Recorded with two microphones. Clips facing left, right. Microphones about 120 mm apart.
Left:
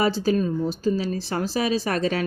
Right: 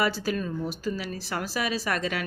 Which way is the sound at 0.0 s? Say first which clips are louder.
Left 6 dB; 25° left (ahead or behind).